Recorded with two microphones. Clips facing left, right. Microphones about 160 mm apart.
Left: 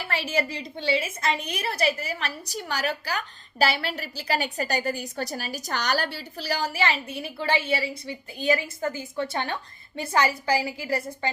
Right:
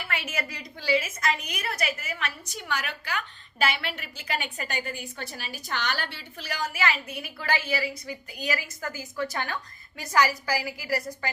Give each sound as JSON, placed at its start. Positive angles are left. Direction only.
{"t": 0.0, "sound": "a woman's voice", "side_deg": 30}